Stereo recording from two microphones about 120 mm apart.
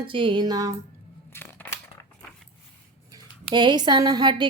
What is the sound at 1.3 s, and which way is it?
Scissors, 20° left (ahead or behind).